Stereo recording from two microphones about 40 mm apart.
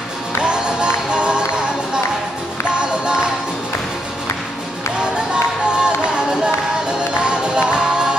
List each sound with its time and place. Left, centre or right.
0.4 s music: right
5.1 s music: right